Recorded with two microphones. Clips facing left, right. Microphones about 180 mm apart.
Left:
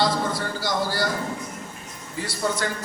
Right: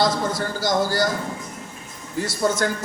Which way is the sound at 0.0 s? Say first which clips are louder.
Right 2 dB; 40° right (ahead or behind).